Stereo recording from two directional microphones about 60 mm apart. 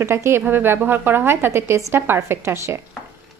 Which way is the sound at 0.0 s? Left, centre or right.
Right.